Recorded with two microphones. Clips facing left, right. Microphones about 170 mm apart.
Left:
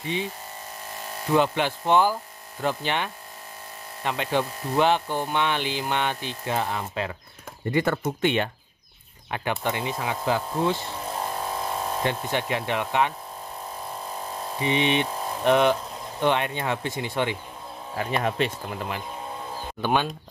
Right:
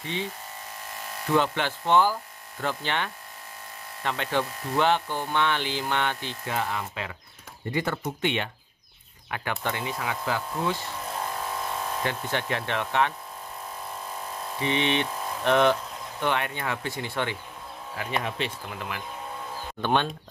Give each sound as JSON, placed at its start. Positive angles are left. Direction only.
{"t": 0.0, "sound": "speech", "side_deg": 15}
{"t": 6.5, "sound": "speech", "side_deg": 30}
{"t": 7.7, "sound": "speech", "side_deg": 50}
{"t": 9.3, "sound": "speech", "side_deg": 25}
{"t": 14.6, "sound": "speech", "side_deg": 15}
{"t": 18.2, "sound": "speech", "side_deg": 40}
{"t": 19.8, "sound": "speech", "side_deg": 5}